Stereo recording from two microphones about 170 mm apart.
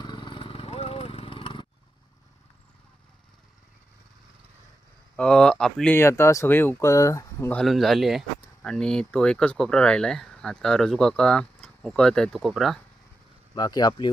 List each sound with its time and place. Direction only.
0.0 s a sound: 25° left (ahead or behind)
5.1 s speech: 5° left (ahead or behind)
7.6 s speech: centre (ahead or behind)
13.6 s speech: 25° left (ahead or behind)